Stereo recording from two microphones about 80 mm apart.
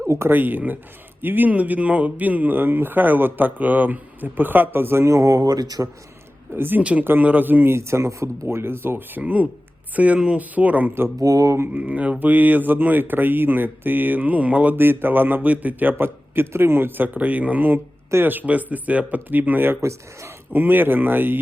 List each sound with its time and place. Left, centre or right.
0.3 s a man's voice: right
6.5 s a man's voice: right
11.2 s mantra: right
11.7 s a man's voice: centre
19.8 s speech: right
20.5 s a man's voice: right